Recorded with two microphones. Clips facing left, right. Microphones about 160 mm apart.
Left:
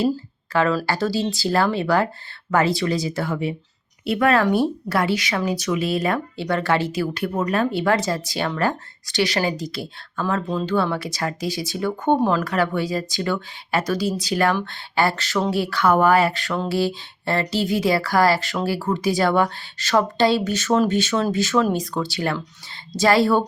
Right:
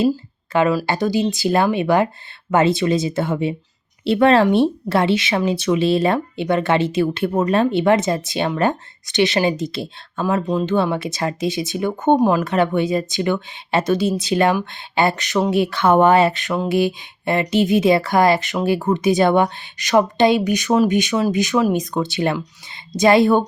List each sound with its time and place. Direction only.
0.5 s speech: 15° right (ahead or behind)